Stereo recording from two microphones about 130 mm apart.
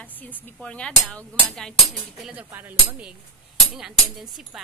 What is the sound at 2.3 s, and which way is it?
Speech, 15° right (ahead or behind).